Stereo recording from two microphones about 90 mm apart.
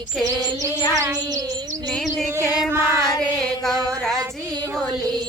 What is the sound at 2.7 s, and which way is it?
Chant, 30° right (ahead or behind).